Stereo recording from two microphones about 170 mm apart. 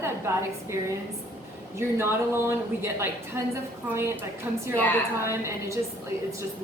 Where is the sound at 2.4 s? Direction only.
15° right (ahead or behind).